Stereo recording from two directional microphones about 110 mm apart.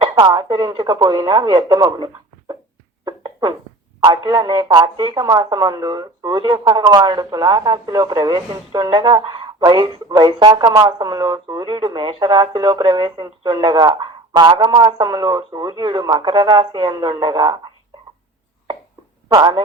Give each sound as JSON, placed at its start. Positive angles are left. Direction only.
{"t": 0.2, "sound": "speech", "side_deg": -35}
{"t": 3.0, "sound": "a sound", "side_deg": -40}
{"t": 4.0, "sound": "speech", "side_deg": -40}
{"t": 19.3, "sound": "speech", "side_deg": -35}